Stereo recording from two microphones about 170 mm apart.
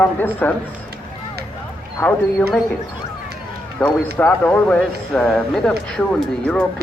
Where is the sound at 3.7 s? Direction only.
10° left (ahead or behind).